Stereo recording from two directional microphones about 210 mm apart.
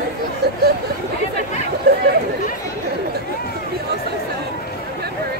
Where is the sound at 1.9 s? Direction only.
50° right (ahead or behind).